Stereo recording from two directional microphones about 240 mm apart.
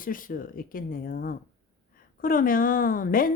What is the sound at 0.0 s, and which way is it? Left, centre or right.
Speech, left.